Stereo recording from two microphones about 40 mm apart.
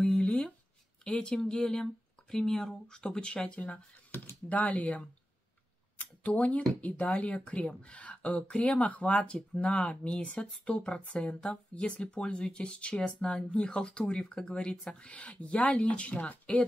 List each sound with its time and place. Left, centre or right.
0.0 s a sound: centre
1.0 s speech: left
3.5 s speech: left
5.9 s a sound: left
6.8 s speech: left
9.1 s speech: left
9.8 s speech: left